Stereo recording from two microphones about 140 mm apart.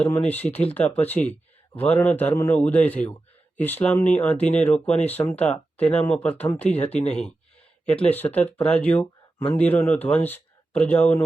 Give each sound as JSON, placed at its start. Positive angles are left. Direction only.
{"t": 0.0, "sound": "speech", "side_deg": 10}
{"t": 6.9, "sound": "speech", "side_deg": 50}
{"t": 7.9, "sound": "speech", "side_deg": 10}